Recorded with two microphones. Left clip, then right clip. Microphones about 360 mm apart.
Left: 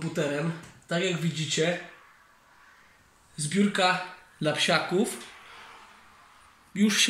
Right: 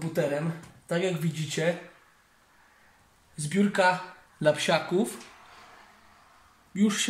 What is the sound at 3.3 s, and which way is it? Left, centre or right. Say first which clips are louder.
Speech: right 1 dB; right.